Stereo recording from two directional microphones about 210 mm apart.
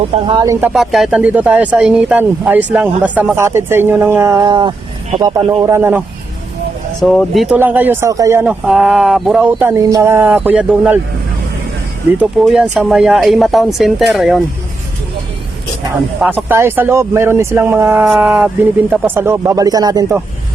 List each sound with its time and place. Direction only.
0.3 s speech: 20° right (ahead or behind)
0.7 s speech: centre (ahead or behind)
7.0 s speech: centre (ahead or behind); by 8.4 s 15° right (ahead or behind)
8.4 s speech: 5° right (ahead or behind)
12.1 s speech: 5° right (ahead or behind)
16.2 s speech: 10° right (ahead or behind)